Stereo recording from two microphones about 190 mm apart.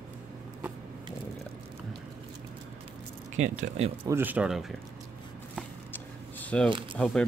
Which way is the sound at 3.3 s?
40° right (ahead or behind).